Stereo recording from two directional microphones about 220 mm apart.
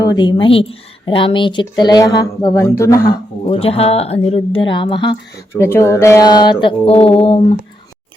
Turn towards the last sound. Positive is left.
turn(degrees=25)  # may be behind; listen again after turning